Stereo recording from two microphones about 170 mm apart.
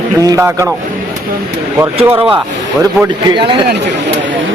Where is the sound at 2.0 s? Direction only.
10° right (ahead or behind).